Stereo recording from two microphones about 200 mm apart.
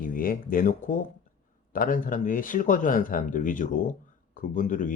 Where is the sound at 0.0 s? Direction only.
45° left (ahead or behind).